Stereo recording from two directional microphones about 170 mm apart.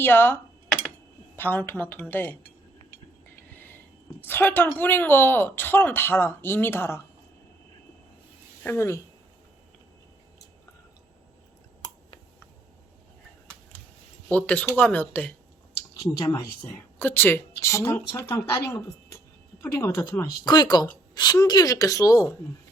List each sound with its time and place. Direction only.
0.0 s speech: 15° left (ahead or behind)
1.4 s speech: 10° left (ahead or behind)
4.2 s speech: 10° left (ahead or behind)
8.6 s speech: 15° left (ahead or behind)
14.3 s a woman's voice: 10° left (ahead or behind)